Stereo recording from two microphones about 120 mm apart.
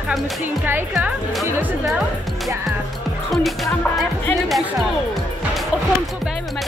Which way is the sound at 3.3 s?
Centre (ahead or behind).